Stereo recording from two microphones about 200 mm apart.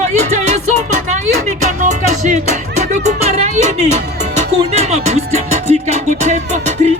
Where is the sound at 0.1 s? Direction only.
35° right (ahead or behind).